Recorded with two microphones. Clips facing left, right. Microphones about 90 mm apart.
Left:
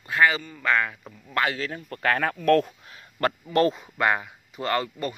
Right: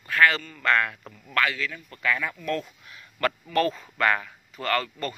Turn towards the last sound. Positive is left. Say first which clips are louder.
# left 1 dB
turn(degrees=15)  # may be behind; listen again after turning